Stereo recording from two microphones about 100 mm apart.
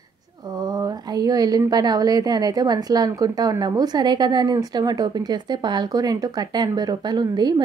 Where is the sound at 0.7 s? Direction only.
40° right (ahead or behind).